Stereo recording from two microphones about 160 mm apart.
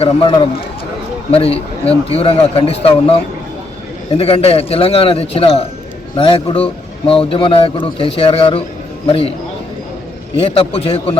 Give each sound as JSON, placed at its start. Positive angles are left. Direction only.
{"t": 0.0, "sound": "a man's voice", "side_deg": 35}
{"t": 10.3, "sound": "a man's voice", "side_deg": 35}